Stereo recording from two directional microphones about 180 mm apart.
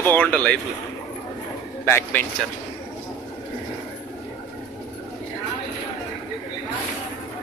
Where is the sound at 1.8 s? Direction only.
15° left (ahead or behind).